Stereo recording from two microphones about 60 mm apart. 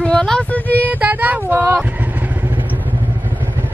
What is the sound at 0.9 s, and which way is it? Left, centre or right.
Speech, right.